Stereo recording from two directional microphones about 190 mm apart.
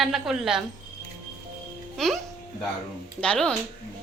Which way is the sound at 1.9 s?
Centre (ahead or behind).